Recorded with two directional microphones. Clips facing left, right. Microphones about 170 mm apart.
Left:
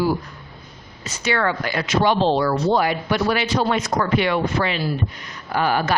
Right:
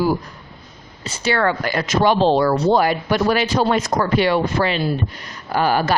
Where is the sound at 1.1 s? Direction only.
35° right (ahead or behind).